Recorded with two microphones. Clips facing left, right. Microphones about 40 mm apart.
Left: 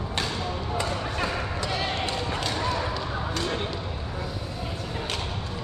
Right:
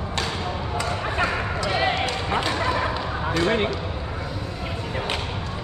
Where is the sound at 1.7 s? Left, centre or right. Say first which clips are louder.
Right 7 dB; right.